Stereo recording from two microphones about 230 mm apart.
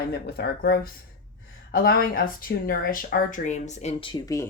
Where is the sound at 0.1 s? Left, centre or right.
Left.